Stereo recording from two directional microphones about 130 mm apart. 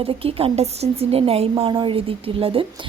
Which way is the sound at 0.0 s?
50° right (ahead or behind).